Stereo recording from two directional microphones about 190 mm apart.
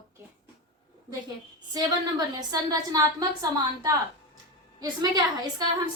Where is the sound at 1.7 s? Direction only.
20° right (ahead or behind).